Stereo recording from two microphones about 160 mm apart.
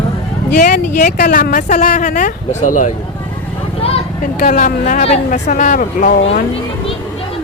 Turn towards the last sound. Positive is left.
turn(degrees=55)  # may be behind; listen again after turning